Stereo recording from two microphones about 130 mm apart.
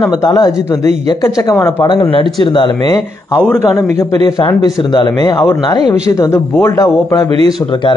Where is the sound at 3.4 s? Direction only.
15° left (ahead or behind).